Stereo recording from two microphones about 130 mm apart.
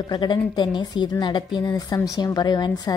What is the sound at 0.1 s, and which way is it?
A woman's voice, 35° left (ahead or behind).